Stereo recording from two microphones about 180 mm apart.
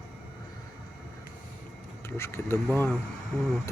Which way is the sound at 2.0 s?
15° left (ahead or behind).